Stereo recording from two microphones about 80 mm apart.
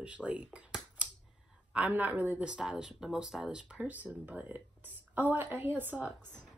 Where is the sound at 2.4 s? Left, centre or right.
Centre.